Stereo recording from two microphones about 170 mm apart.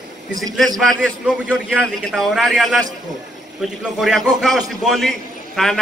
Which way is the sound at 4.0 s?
Centre (ahead or behind).